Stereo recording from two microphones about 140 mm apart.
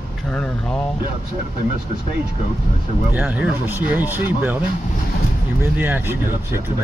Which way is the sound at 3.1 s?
10° right (ahead or behind).